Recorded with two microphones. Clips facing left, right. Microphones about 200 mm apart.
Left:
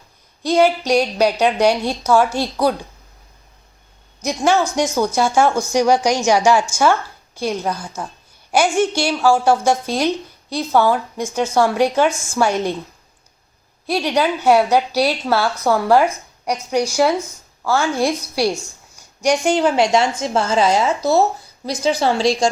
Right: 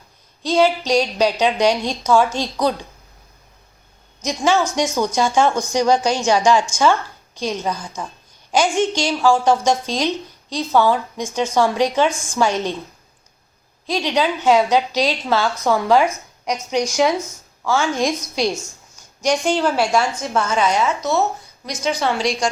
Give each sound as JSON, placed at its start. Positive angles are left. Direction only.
{"t": 0.4, "sound": "a woman's voice", "side_deg": 10}
{"t": 4.2, "sound": "a woman's voice", "side_deg": 10}
{"t": 13.8, "sound": "a woman's voice", "side_deg": 10}